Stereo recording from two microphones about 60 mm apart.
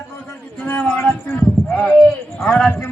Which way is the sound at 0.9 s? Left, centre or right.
Left.